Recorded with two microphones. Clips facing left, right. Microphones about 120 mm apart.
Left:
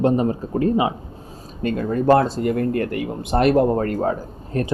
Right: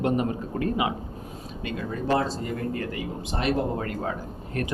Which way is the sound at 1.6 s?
50° left (ahead or behind).